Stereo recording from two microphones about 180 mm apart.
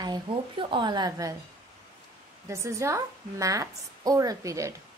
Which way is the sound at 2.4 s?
15° right (ahead or behind).